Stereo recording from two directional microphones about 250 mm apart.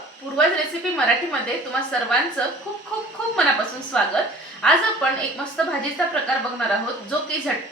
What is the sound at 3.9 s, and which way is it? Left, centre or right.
Speech, centre.